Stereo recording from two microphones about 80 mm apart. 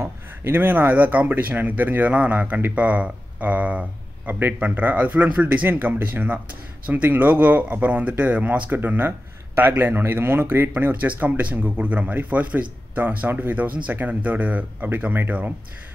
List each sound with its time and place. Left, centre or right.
0.0 s speech: right